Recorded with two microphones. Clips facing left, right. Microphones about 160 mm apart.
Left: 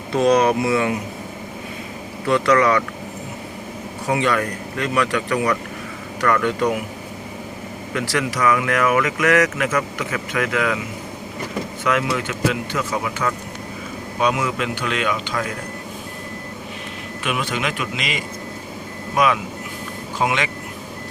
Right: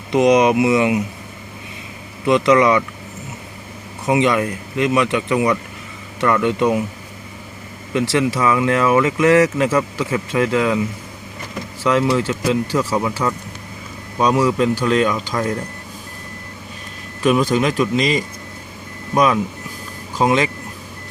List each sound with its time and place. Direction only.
0.1 s speech: 15° right (ahead or behind)
2.2 s speech: 20° right (ahead or behind)
4.0 s speech: 20° right (ahead or behind)
7.9 s speech: 25° right (ahead or behind)
11.8 s a man's voice: 30° right (ahead or behind)
17.2 s a man's voice: 35° right (ahead or behind)